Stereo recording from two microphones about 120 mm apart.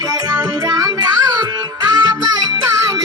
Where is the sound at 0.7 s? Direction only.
35° right (ahead or behind).